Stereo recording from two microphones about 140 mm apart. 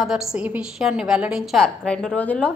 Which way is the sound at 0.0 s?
5° right (ahead or behind).